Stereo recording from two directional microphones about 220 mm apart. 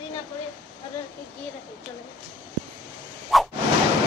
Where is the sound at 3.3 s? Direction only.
Centre (ahead or behind).